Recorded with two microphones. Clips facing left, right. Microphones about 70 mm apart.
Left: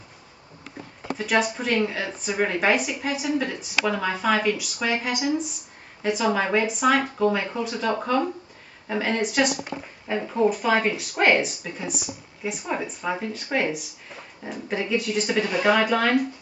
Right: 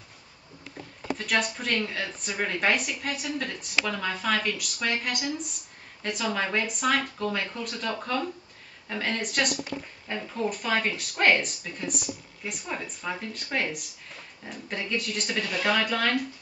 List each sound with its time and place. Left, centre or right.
1.1 s speech: centre
10.2 s speech: centre
10.5 s speech: centre